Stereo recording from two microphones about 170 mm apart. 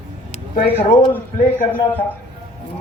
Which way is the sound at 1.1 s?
10° left (ahead or behind).